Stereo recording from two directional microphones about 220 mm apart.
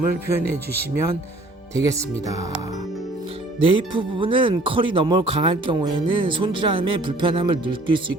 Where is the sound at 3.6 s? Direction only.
25° right (ahead or behind).